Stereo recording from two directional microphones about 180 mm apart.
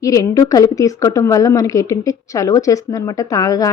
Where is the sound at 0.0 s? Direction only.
20° left (ahead or behind).